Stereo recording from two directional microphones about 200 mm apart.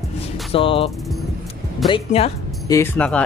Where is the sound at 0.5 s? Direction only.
25° left (ahead or behind).